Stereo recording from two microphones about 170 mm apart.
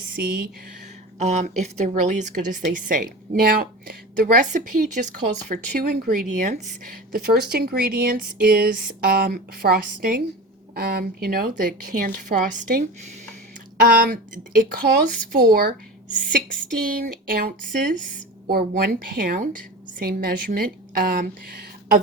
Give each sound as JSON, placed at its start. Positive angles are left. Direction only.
{"t": 0.2, "sound": "speech", "side_deg": -65}
{"t": 1.2, "sound": "a woman's voice", "side_deg": -45}
{"t": 13.8, "sound": "a woman's voice", "side_deg": -65}
{"t": 17.2, "sound": "speech", "side_deg": -60}